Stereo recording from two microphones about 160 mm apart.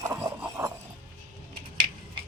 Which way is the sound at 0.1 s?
15° right (ahead or behind).